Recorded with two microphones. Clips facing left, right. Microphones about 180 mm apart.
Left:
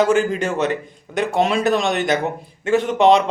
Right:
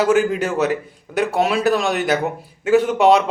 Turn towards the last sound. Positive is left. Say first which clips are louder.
# right 1 dB
turn(degrees=-5)  # may be behind; listen again after turning